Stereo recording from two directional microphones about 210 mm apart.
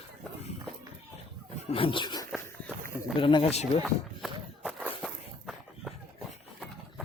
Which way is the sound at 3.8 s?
Centre (ahead or behind).